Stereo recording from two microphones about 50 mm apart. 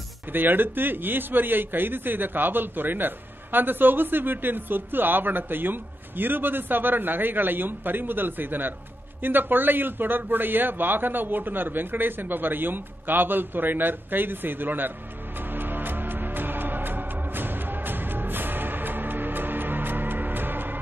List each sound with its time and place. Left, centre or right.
0.3 s a man's voice: right
15.5 s music: right